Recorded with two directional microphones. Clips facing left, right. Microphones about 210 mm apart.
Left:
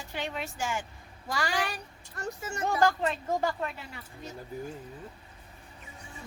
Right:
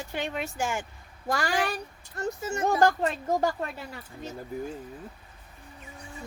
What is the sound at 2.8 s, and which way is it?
A woman's voice, 40° right (ahead or behind).